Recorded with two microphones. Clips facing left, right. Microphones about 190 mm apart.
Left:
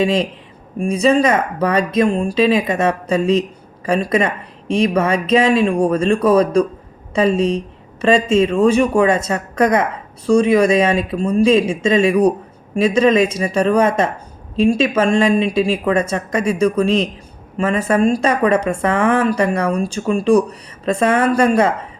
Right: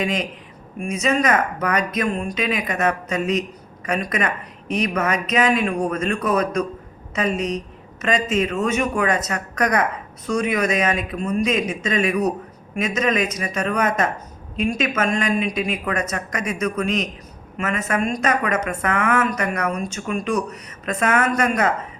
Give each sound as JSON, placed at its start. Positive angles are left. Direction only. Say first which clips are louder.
{"t": 0.0, "sound": "speech", "louder": "left 7 dB", "side_deg": 30}